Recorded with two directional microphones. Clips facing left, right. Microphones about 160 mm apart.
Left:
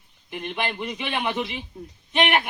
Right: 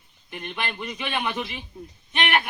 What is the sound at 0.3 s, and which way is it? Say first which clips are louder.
A man's voice: left 3 dB; 15° left (ahead or behind).